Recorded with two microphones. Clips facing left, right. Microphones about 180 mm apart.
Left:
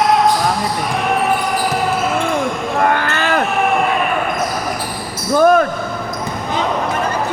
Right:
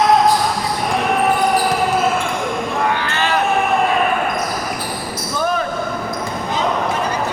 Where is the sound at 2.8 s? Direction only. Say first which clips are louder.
Left 5 dB; 50° left (ahead or behind).